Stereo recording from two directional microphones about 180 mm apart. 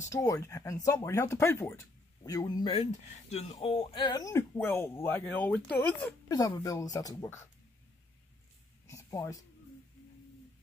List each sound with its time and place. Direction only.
0.0 s speech: 15° left (ahead or behind)
6.2 s speech: 20° left (ahead or behind)
8.8 s a sound: 15° left (ahead or behind)